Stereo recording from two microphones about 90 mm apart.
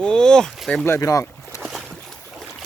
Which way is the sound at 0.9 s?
35° left (ahead or behind).